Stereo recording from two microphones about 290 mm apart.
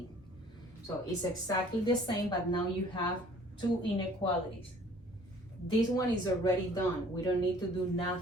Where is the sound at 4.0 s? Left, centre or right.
Centre.